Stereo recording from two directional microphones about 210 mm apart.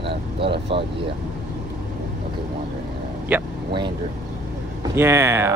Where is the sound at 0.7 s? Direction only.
25° right (ahead or behind).